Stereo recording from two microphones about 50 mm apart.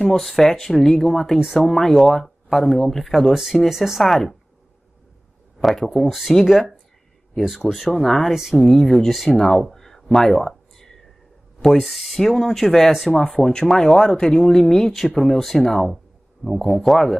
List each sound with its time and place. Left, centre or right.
0.0 s speech: centre
3.6 s speech: centre
5.6 s speech: centre
7.3 s speech: centre
13.4 s speech: centre
13.9 s speech: centre